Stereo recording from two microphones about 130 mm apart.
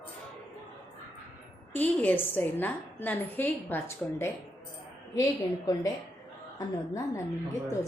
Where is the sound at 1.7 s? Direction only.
10° left (ahead or behind).